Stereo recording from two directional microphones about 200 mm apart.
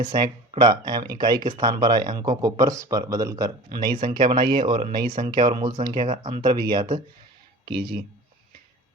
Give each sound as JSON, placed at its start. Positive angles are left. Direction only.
{"t": 0.1, "sound": "speech", "side_deg": -25}